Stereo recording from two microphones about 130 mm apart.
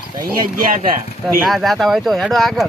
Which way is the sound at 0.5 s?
90° right.